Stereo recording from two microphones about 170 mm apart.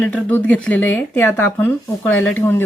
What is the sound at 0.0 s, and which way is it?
Speech, 10° left (ahead or behind).